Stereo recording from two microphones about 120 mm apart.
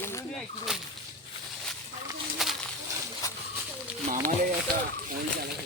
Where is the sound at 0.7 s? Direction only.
5° right (ahead or behind).